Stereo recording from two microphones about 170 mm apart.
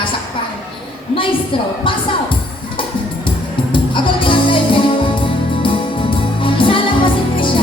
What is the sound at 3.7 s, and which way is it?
Music, 30° left (ahead or behind).